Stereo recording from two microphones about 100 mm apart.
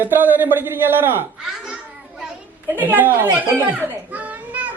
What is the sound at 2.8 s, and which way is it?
A child's voice, 20° right (ahead or behind).